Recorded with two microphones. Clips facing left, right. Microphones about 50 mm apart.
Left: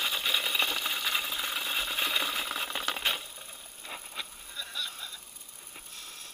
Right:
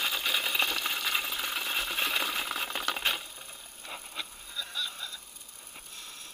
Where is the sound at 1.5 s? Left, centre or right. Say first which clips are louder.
Right 1 dB; right.